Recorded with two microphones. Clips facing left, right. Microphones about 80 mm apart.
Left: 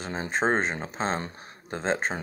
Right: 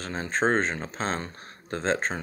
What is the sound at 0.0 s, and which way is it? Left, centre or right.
Speech, centre.